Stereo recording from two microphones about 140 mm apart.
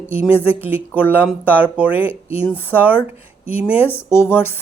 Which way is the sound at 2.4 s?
15° left (ahead or behind).